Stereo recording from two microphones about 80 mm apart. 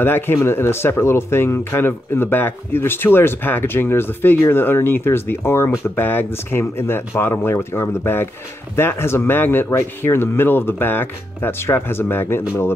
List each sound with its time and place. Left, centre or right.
0.0 s speech: left